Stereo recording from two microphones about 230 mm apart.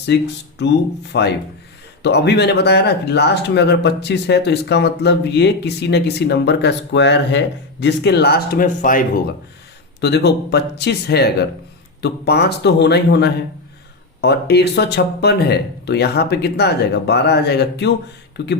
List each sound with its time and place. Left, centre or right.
0.1 s speech: left